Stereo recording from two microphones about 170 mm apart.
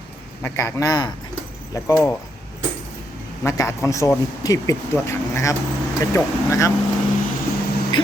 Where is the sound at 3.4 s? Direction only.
15° left (ahead or behind).